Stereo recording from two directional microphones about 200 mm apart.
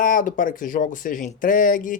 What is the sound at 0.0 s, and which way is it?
Speech, 40° left (ahead or behind).